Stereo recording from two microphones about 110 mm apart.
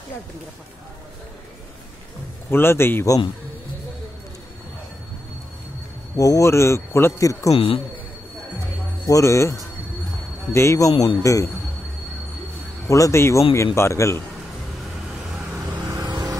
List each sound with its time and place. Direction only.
2.5 s a man's voice: 20° left (ahead or behind)
6.1 s a man's voice: 30° left (ahead or behind)
7.5 s a man's voice: 60° left (ahead or behind)
9.0 s a man's voice: 30° left (ahead or behind)
12.8 s a man's voice: 30° left (ahead or behind)
16.0 s vehicle: 35° right (ahead or behind)